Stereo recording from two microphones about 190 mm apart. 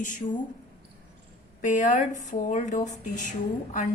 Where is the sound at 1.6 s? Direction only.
40° left (ahead or behind).